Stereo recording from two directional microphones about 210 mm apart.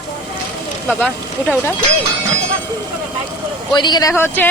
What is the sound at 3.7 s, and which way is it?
Speech, 20° left (ahead or behind).